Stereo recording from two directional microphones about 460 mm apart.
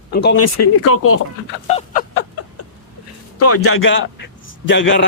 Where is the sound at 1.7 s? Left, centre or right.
Centre.